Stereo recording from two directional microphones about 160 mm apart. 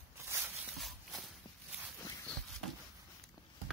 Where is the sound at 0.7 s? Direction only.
Centre (ahead or behind).